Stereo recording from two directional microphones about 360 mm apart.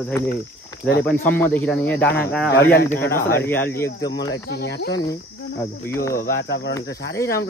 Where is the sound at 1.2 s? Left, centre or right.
Centre.